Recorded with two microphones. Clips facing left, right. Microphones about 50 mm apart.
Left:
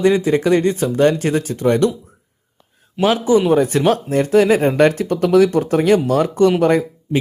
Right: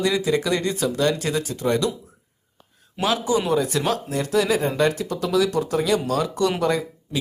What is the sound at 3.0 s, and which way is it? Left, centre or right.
Speech, left.